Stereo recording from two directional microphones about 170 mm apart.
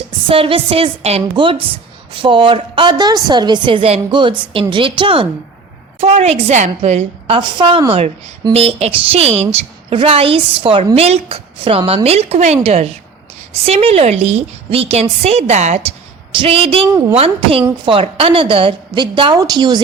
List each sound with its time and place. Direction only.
0.3 s a woman's voice: 35° right (ahead or behind)